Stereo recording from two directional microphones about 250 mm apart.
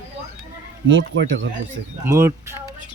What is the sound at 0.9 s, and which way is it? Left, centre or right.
Speech, right.